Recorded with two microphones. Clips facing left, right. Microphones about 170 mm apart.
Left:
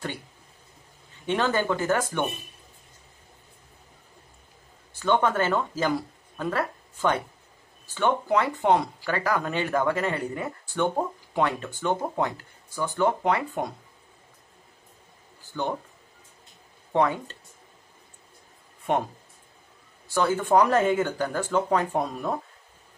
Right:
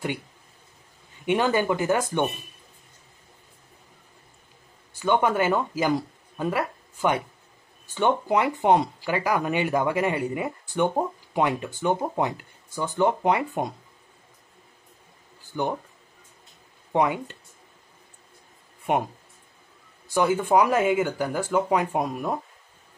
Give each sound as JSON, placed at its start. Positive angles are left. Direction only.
{"t": 1.2, "sound": "speech", "side_deg": -15}
{"t": 4.9, "sound": "speech", "side_deg": -10}
{"t": 15.5, "sound": "speech", "side_deg": -15}
{"t": 16.9, "sound": "speech", "side_deg": -15}
{"t": 18.9, "sound": "speech", "side_deg": -15}
{"t": 20.2, "sound": "speech", "side_deg": -15}